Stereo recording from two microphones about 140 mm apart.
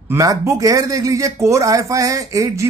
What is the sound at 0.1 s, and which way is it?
Speech, 20° right (ahead or behind).